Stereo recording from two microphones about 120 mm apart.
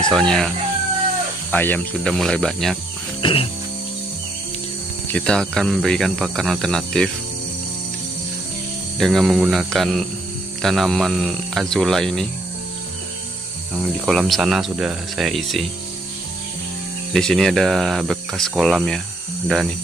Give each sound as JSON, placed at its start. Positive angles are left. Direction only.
{"t": 0.1, "sound": "speech", "side_deg": 5}
{"t": 1.5, "sound": "speech", "side_deg": 15}
{"t": 3.2, "sound": "ratchet", "side_deg": 45}
{"t": 5.0, "sound": "speech", "side_deg": 10}
{"t": 9.0, "sound": "speech", "side_deg": 0}
{"t": 13.7, "sound": "speech", "side_deg": -5}
{"t": 17.1, "sound": "speech", "side_deg": 5}